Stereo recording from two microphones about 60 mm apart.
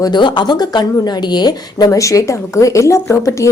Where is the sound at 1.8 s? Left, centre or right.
Left.